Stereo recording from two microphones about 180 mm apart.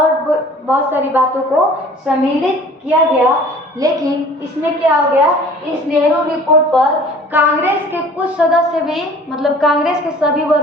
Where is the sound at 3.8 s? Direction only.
20° right (ahead or behind).